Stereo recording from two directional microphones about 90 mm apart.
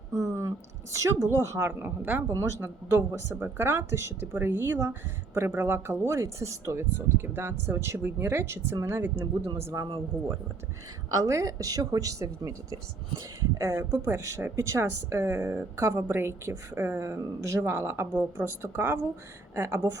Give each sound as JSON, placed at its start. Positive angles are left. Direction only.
{"t": 0.1, "sound": "a sound", "side_deg": -35}
{"t": 1.3, "sound": "speech", "side_deg": -25}
{"t": 2.2, "sound": "speech", "side_deg": -30}
{"t": 9.6, "sound": "speech", "side_deg": -40}
{"t": 11.1, "sound": "speech", "side_deg": -40}
{"t": 16.1, "sound": "speech", "side_deg": -25}